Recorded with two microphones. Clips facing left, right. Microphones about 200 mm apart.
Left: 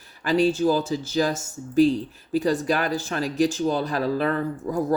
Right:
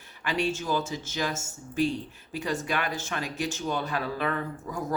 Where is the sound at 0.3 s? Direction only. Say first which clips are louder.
Left 9 dB; 35° left (ahead or behind).